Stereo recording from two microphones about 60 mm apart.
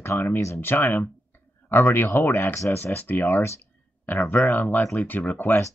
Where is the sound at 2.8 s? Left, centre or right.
Left.